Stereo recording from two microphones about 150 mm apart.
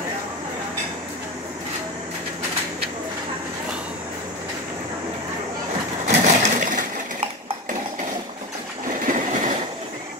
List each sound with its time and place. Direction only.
6.0 s crushing: 55° right (ahead or behind)
9.0 s train: 60° right (ahead or behind)